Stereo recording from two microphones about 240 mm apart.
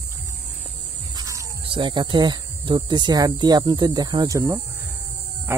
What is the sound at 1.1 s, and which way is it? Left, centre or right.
Speech, centre.